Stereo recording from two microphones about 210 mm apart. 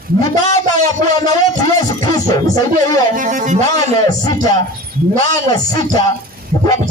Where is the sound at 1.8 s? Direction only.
20° left (ahead or behind).